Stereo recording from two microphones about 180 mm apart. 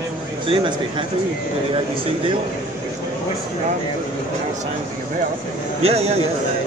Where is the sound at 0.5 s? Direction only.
25° right (ahead or behind).